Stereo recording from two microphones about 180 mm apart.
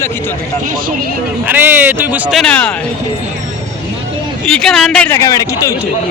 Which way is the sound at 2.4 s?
5° left (ahead or behind).